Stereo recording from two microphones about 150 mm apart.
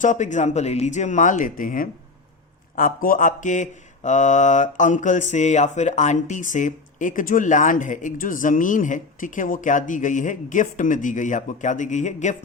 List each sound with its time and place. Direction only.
0.0 s speech: 55° left (ahead or behind)